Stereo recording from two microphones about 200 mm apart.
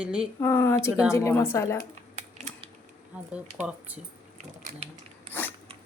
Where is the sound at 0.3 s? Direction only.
10° left (ahead or behind).